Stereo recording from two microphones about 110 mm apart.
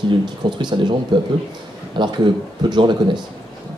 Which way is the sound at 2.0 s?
45° right (ahead or behind).